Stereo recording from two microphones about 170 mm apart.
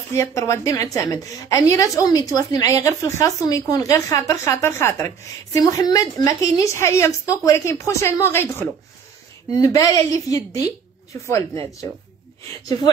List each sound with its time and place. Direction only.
0.1 s a woman's voice: 15° left (ahead or behind)